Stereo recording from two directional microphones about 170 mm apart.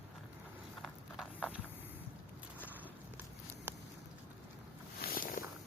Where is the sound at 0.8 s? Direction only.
Centre (ahead or behind).